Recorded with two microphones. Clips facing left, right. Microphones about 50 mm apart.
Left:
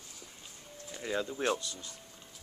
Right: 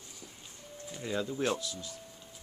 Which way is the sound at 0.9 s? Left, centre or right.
Centre.